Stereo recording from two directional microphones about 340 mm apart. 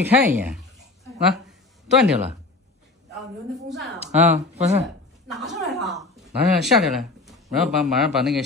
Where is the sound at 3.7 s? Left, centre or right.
Centre.